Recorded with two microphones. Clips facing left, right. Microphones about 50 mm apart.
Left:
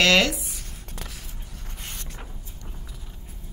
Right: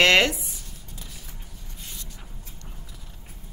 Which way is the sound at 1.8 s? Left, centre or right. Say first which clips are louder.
Left 3 dB; left.